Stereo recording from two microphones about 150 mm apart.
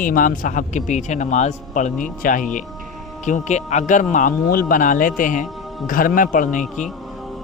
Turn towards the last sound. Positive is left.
turn(degrees=60)  # may be behind; listen again after turning